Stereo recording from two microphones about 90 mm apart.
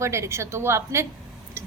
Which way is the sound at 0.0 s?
30° right (ahead or behind).